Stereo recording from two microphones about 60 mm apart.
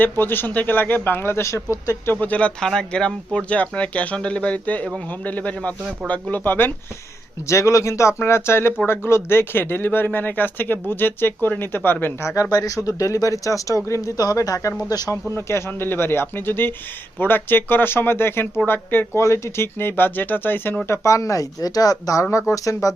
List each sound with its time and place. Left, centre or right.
0.0 s speech: left
2.2 s speech: left
2.6 s speech: centre; by 6.7 s left
7.4 s speech: left
12.4 s speech: left
14.8 s speech: left
15.4 s speech: left
19.2 s speech: left
20.9 s speech: left